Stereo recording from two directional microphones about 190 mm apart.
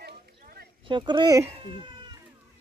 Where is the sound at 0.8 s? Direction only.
25° right (ahead or behind).